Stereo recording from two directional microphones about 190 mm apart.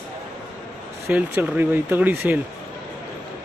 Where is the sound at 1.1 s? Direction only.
10° right (ahead or behind).